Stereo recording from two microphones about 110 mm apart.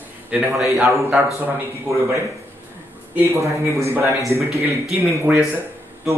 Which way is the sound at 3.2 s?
30° right (ahead or behind).